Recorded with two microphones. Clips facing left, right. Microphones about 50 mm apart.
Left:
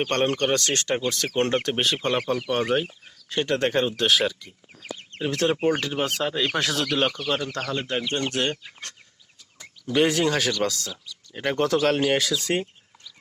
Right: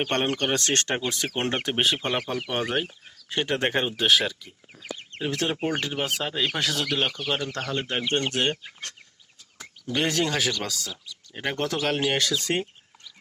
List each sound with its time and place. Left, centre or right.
0.0 s speech: centre
0.6 s speech: right
1.0 s speech: right
2.0 s speech: centre
3.3 s speech: right
3.9 s speech: centre
7.3 s speech: centre
7.5 s speech: right
9.8 s speech: centre
11.0 s speech: centre